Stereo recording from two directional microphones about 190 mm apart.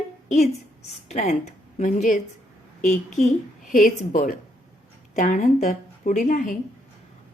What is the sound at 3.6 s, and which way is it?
A woman's voice, 45° left (ahead or behind).